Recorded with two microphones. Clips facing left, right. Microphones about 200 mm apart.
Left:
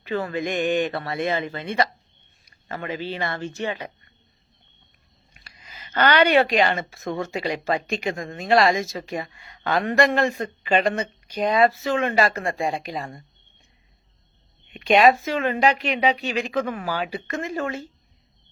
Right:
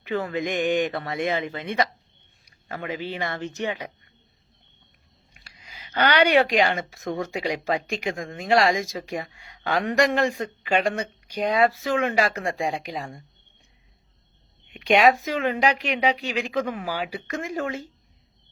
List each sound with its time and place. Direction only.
0.0 s a woman's voice: 15° right (ahead or behind)
5.5 s a woman's voice: 10° right (ahead or behind)
14.7 s a woman's voice: 15° right (ahead or behind)